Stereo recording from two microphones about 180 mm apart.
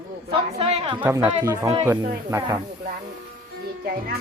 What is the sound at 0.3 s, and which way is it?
Speech, 30° right (ahead or behind).